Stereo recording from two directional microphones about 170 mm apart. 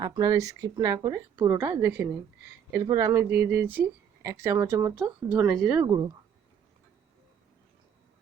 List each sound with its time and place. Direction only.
0.0 s speech: 25° right (ahead or behind)
2.8 s speech: 25° right (ahead or behind); by 5.8 s 5° right (ahead or behind)
5.8 s speech: 20° right (ahead or behind)